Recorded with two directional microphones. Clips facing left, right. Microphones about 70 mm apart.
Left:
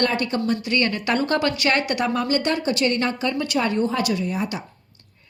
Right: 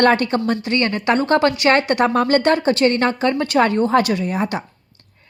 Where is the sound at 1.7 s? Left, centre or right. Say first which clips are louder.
Right 6 dB; right.